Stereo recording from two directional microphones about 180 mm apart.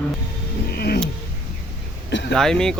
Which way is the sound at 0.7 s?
60° left (ahead or behind).